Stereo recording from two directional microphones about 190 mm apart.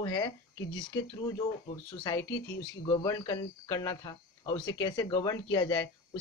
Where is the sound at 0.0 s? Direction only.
25° left (ahead or behind).